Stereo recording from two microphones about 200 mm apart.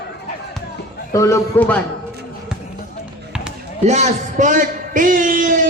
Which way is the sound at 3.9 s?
35° right (ahead or behind).